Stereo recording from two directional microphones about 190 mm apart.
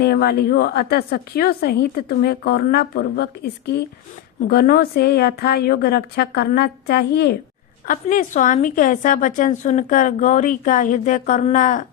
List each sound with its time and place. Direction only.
0.0 s a woman's voice: 55° left (ahead or behind)
7.9 s a woman's voice: 40° left (ahead or behind)